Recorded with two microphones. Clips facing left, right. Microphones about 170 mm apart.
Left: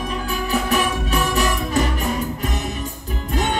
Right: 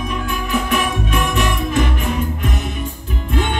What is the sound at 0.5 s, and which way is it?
Music, 35° left (ahead or behind).